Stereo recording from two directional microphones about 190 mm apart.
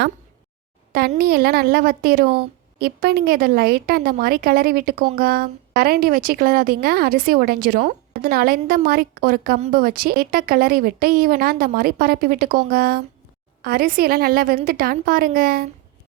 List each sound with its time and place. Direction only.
1.2 s a woman's voice: 55° right (ahead or behind)